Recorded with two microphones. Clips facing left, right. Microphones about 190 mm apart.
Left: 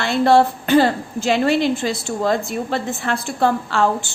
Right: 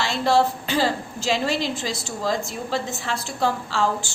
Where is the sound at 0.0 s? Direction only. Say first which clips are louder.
Left 5 dB; 55° left (ahead or behind).